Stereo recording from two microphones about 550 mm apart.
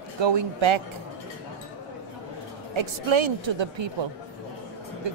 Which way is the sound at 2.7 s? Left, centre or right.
Right.